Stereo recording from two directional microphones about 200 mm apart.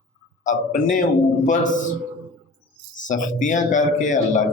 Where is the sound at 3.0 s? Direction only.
40° left (ahead or behind).